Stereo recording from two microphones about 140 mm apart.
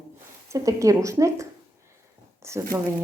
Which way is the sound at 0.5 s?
25° right (ahead or behind).